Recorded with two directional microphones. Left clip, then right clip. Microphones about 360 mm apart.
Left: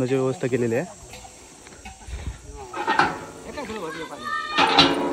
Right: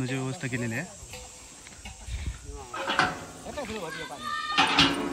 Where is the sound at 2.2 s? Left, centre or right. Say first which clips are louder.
Left 5 dB; centre.